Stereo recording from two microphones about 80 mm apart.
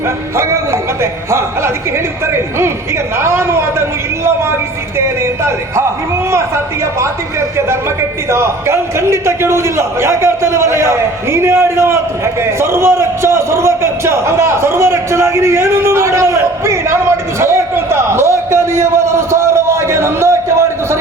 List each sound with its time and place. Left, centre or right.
0.3 s music: right
3.2 s a man's voice: right
8.3 s a man's voice: right
17.4 s a sound: right